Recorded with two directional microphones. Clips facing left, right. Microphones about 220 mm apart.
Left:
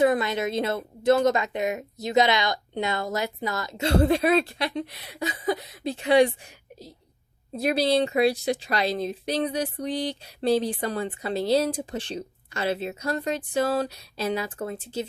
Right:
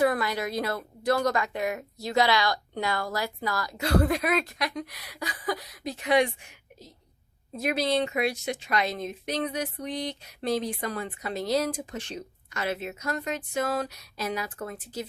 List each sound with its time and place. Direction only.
0.0 s a woman's voice: 20° left (ahead or behind)